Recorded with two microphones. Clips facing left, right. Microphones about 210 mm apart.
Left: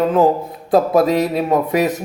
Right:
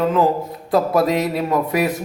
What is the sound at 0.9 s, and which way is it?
Music, 20° left (ahead or behind).